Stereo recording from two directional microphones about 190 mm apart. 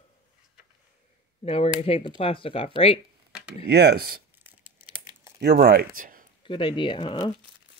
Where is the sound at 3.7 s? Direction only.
60° right (ahead or behind).